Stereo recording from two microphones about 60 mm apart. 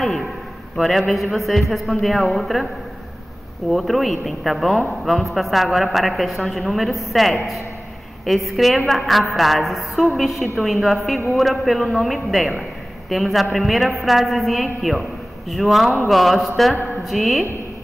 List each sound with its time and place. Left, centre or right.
0.7 s a man's voice: centre
3.7 s a man's voice: centre
8.5 s a man's voice: centre
16.7 s a sound: left
17.0 s a man's voice: centre